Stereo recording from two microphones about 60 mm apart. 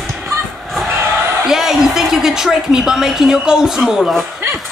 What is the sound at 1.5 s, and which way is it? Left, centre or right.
A woman's voice, centre.